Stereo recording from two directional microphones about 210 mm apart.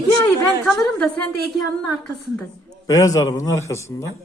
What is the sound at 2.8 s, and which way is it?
Speech, 15° left (ahead or behind).